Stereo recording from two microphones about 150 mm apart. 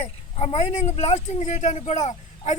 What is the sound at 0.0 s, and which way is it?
Speech, 45° left (ahead or behind).